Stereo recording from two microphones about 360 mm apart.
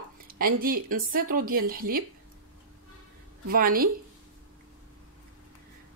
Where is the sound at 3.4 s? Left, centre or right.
Right.